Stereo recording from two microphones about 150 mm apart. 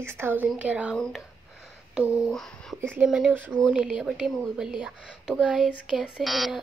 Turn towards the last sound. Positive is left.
turn(degrees=0)  # may be behind; listen again after turning